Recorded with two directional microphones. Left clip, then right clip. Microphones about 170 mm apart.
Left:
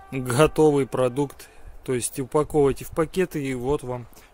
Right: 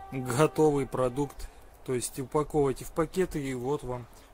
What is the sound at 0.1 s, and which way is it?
Speech, 40° left (ahead or behind).